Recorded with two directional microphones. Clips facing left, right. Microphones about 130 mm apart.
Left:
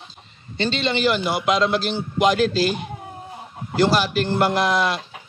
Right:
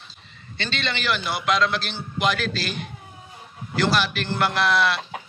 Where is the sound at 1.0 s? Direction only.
40° left (ahead or behind).